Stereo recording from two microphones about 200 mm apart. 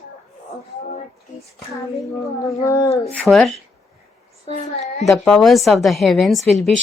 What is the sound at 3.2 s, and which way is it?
Speech, centre (ahead or behind).